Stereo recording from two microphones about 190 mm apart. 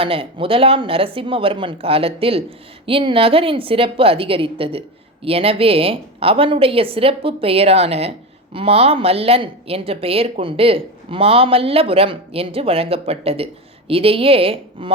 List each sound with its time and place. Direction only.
0.0 s a woman's voice: 30° right (ahead or behind)